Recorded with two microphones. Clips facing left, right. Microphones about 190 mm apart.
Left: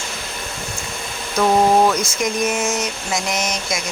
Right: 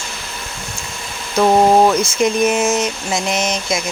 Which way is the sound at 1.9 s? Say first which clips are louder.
Right 5 dB; 30° right (ahead or behind).